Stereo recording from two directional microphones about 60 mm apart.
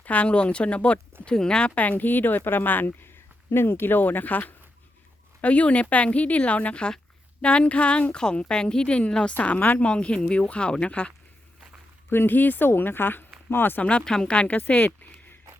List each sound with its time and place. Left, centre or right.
0.0 s a woman's voice: left
12.0 s speech: left
14.0 s speech: centre; by 14.9 s left